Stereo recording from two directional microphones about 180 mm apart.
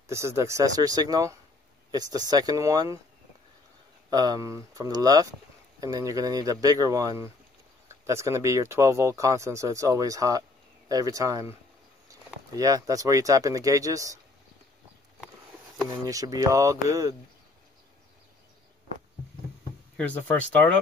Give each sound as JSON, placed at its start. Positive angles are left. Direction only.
{"t": 0.0, "sound": "speech", "side_deg": -15}
{"t": 4.1, "sound": "speech", "side_deg": -20}
{"t": 12.5, "sound": "speech", "side_deg": -20}
{"t": 15.9, "sound": "speech", "side_deg": -20}